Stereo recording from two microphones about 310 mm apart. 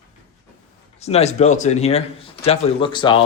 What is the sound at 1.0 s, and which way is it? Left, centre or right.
A man's voice, centre.